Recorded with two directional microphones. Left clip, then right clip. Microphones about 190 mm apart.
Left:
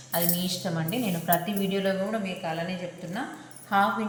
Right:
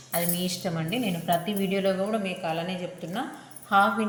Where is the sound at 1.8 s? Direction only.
35° right (ahead or behind).